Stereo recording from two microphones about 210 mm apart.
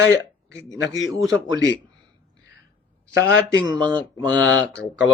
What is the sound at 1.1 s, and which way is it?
Speech, 15° right (ahead or behind).